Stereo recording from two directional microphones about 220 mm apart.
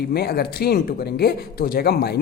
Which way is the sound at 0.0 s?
45° left (ahead or behind).